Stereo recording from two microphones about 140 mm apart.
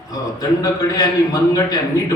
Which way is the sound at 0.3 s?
25° left (ahead or behind).